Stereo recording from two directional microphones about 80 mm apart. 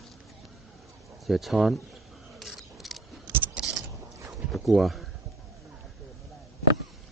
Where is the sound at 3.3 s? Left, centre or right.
Right.